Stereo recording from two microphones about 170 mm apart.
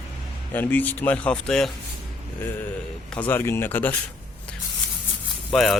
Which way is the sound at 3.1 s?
10° left (ahead or behind).